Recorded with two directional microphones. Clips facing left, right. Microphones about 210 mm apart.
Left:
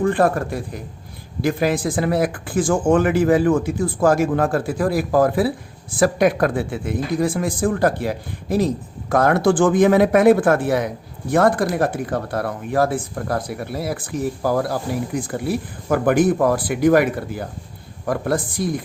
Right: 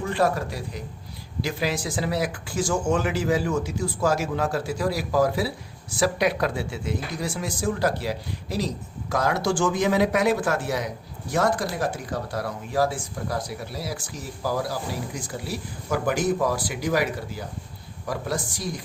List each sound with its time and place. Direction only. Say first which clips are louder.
0.0 s speech: left 6 dB; 55° left (ahead or behind)